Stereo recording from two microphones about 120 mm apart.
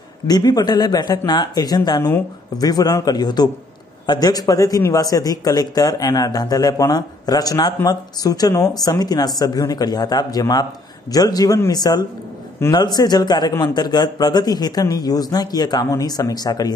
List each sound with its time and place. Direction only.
0.3 s a man's voice: 35° left (ahead or behind)